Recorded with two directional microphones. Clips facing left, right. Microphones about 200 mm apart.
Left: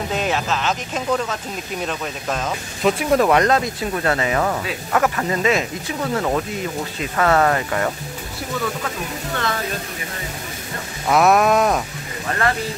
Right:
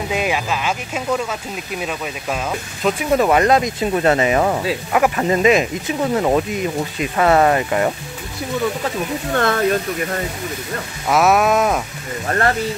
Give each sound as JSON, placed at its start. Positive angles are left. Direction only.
{"t": 0.1, "sound": "speech", "side_deg": -10}
{"t": 4.9, "sound": "speech", "side_deg": -10}
{"t": 9.3, "sound": "speech", "side_deg": -55}
{"t": 11.1, "sound": "a sound", "side_deg": 0}